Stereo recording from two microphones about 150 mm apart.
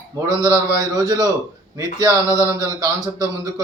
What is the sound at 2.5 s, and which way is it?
Speech, 25° right (ahead or behind).